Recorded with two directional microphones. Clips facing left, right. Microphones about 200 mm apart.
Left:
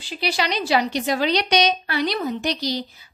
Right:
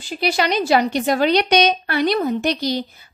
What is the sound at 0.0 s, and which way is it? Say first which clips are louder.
A woman's voice: right 4 dB; 50° right (ahead or behind).